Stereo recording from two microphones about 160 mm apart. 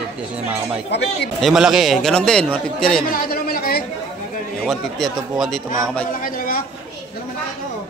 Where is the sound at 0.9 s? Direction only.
90° left.